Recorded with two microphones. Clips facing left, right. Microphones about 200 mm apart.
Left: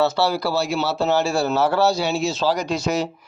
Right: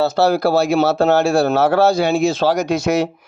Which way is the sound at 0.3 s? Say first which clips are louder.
Right 7 dB; 50° right (ahead or behind).